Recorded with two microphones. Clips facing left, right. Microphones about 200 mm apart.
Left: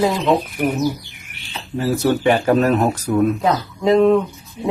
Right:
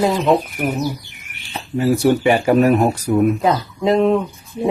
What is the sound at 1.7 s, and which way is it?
Speech, 10° right (ahead or behind).